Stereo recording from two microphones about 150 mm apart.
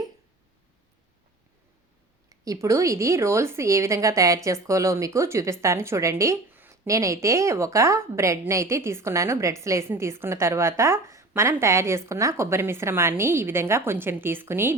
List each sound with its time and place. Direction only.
2.3 s a woman's voice: 20° right (ahead or behind)